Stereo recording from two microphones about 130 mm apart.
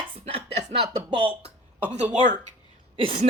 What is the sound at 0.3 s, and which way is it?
Speech, 45° right (ahead or behind).